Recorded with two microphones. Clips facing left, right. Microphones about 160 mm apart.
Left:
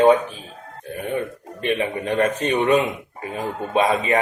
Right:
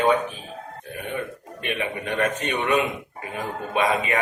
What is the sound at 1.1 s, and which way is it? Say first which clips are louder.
A man's voice: left 4 dB; 30° left (ahead or behind).